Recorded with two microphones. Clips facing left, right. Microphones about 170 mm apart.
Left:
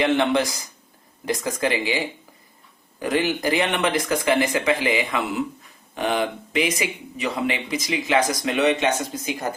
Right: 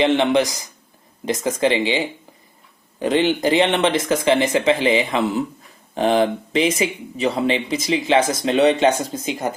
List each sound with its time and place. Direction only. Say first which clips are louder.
0.0 s speech: right 3 dB; 20° right (ahead or behind)